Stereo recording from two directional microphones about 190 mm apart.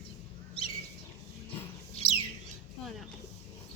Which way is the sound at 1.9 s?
30° left (ahead or behind).